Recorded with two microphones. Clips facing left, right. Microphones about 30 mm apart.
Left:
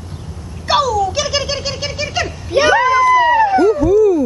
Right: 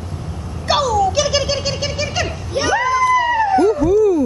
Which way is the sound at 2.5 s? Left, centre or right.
Left.